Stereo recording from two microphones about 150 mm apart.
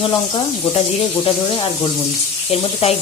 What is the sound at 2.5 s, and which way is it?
Speech, 45° left (ahead or behind).